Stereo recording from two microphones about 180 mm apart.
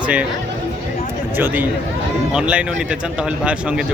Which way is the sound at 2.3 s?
5° right (ahead or behind).